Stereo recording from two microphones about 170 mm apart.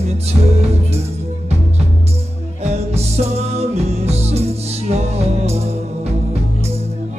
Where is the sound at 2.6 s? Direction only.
40° right (ahead or behind).